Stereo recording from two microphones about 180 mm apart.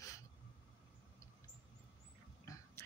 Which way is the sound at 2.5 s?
20° left (ahead or behind).